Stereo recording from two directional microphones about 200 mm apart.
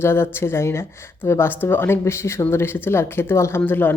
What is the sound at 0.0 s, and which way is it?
Speech, 10° left (ahead or behind).